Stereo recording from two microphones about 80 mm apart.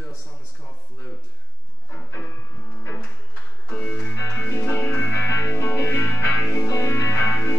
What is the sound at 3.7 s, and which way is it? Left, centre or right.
Music, left.